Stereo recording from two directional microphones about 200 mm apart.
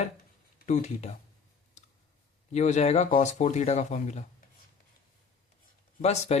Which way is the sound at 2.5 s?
35° left (ahead or behind).